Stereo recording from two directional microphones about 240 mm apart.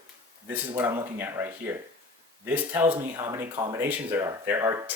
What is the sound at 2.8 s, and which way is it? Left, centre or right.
Speech, right.